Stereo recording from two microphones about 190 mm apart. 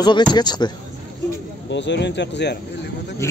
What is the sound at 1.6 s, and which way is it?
Speech, 65° left (ahead or behind).